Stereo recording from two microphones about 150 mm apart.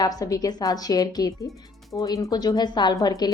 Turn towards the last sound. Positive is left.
turn(degrees=30)  # may be behind; listen again after turning